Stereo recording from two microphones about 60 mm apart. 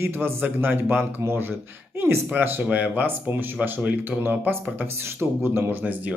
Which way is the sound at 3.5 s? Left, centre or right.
Right.